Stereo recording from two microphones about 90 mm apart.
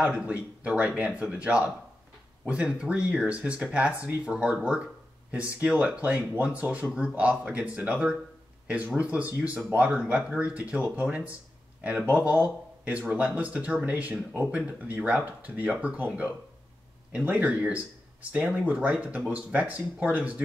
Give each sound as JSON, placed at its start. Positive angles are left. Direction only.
{"t": 0.0, "sound": "speech", "side_deg": -15}